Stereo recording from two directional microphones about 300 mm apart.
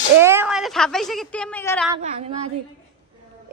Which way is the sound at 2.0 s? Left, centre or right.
Right.